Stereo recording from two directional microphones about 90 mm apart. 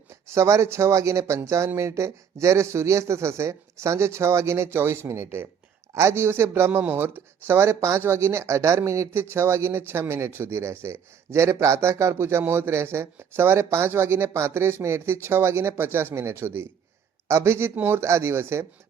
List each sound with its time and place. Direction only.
0.3 s speech: 35° right (ahead or behind)